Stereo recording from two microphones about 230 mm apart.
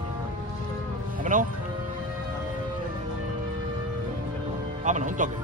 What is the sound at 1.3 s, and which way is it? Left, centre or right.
Music, right.